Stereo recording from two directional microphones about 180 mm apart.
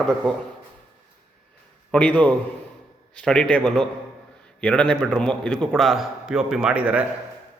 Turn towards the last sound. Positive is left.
turn(degrees=-5)  # may be behind; listen again after turning